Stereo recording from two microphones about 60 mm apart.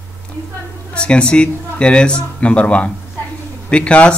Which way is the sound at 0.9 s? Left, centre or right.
Centre.